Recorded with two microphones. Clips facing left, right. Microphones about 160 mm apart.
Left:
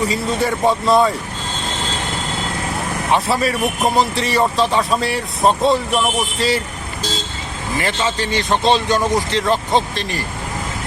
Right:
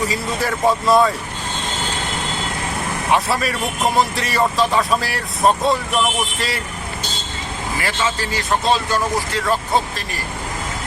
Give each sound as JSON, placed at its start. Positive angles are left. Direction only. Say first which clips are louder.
{"t": 0.0, "sound": "speech", "louder": "left 3 dB", "side_deg": 0}
{"t": 3.1, "sound": "speech", "louder": "left 2 dB", "side_deg": 0}
{"t": 7.9, "sound": "speech", "louder": "left 2 dB", "side_deg": 25}